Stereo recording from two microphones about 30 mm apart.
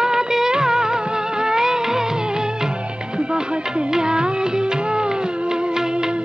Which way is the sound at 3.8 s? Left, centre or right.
Right.